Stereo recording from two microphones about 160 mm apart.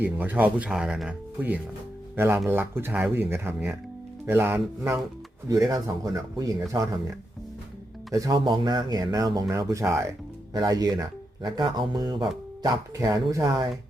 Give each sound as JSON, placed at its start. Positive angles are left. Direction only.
{"t": 0.0, "sound": "speech", "side_deg": -10}
{"t": 8.1, "sound": "speech", "side_deg": -20}